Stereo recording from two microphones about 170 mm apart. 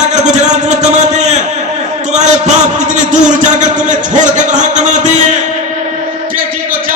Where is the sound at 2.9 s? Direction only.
45° right (ahead or behind).